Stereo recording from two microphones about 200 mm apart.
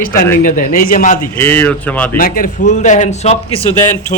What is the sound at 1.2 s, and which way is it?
Speech, 10° left (ahead or behind).